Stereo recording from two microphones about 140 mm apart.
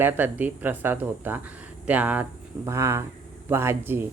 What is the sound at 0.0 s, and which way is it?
Speech, 10° right (ahead or behind).